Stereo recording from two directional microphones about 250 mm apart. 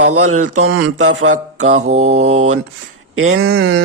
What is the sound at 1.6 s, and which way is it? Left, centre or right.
Mantra, right.